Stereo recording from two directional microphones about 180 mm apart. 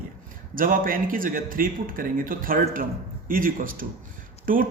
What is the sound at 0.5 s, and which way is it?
Speech, 50° right (ahead or behind).